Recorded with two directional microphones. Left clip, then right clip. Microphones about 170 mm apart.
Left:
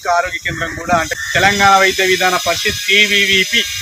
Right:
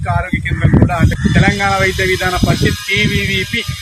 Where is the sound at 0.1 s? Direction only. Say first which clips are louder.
Left 3 dB; 30° left (ahead or behind).